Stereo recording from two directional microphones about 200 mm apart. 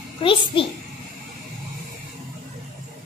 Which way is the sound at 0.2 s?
25° left (ahead or behind).